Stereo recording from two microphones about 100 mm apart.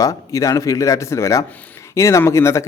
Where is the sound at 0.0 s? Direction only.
35° left (ahead or behind).